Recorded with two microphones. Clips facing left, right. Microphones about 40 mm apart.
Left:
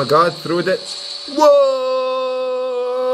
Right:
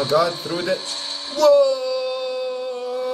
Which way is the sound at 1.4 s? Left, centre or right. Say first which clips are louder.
Left 3 dB; left.